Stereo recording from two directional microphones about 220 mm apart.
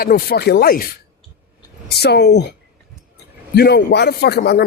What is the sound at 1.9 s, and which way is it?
Speech, 50° left (ahead or behind).